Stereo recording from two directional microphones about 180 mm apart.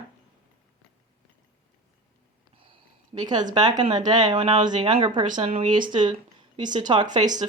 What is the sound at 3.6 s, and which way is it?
Speech, 20° right (ahead or behind).